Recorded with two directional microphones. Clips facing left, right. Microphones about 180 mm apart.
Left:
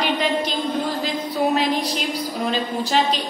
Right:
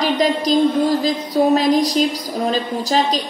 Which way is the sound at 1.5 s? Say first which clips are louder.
Right 7 dB; 40° right (ahead or behind).